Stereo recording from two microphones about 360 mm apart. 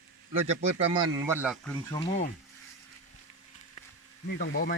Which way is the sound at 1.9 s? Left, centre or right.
Centre.